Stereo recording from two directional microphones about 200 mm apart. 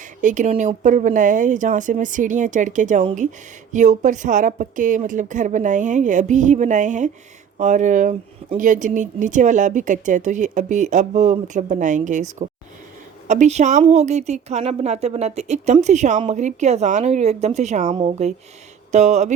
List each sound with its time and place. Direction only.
0.2 s speech: 40° right (ahead or behind)